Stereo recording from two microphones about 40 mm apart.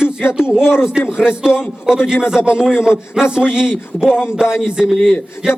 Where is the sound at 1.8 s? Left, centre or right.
Centre.